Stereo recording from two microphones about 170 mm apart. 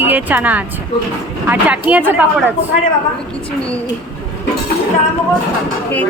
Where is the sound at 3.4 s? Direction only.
5° left (ahead or behind).